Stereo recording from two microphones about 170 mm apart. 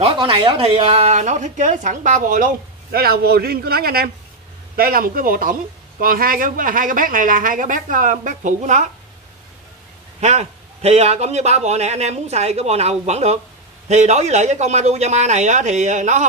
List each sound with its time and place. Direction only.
0.0 s a woman's voice: 30° right (ahead or behind)
10.2 s a man's voice: 40° right (ahead or behind)